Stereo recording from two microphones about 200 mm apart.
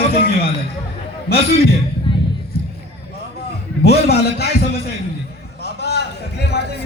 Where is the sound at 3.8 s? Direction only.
55° left (ahead or behind).